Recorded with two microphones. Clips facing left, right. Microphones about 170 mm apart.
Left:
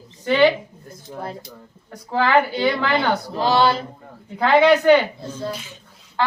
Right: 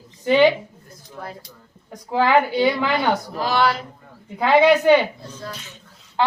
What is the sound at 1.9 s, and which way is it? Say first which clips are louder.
Speech: right 1 dB; 15° right (ahead or behind).